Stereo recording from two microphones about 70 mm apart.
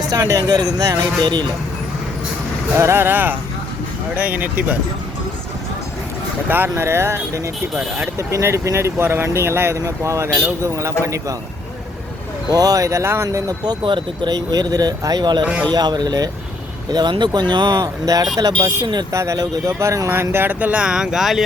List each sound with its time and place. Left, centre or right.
0.0 s speech: right
1.2 s speech: right
2.7 s speech: right
6.5 s speech: right
12.5 s speech: right
14.3 s speech: right
16.9 s speech: right
18.0 s speech: right
19.1 s speech: right
20.3 s speech: right
20.8 s speech: centre